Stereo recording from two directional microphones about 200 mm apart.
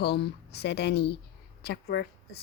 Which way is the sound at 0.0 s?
55° left (ahead or behind).